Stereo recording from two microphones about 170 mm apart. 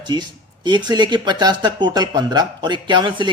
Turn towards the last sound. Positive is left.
turn(degrees=-30)  # may be behind; listen again after turning